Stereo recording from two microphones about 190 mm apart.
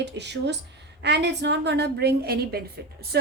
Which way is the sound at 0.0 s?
65° right (ahead or behind).